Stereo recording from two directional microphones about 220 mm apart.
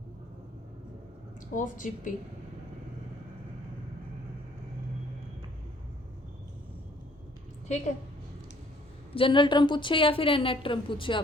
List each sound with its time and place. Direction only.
1.5 s speech: 35° left (ahead or behind)
9.1 s a woman's voice: 20° left (ahead or behind)